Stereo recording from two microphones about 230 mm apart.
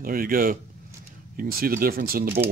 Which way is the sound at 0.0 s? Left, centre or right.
Right.